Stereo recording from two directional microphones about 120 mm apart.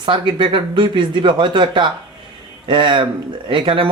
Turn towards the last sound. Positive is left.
turn(degrees=-45)  # may be behind; listen again after turning